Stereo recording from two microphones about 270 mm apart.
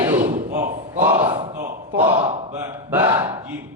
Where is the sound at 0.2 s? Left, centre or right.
Right.